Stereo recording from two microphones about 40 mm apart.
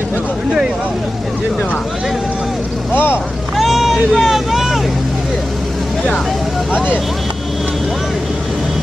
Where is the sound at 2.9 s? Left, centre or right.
Left.